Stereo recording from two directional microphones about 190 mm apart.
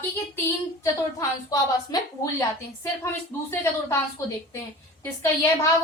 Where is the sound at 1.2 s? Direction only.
20° left (ahead or behind).